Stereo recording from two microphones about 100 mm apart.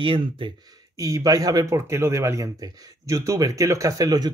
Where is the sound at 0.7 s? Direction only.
35° right (ahead or behind).